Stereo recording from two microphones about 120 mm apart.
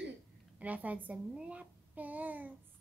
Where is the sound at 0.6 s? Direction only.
15° right (ahead or behind).